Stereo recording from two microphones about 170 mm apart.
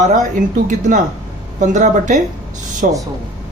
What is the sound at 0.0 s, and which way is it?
Speech, 50° right (ahead or behind).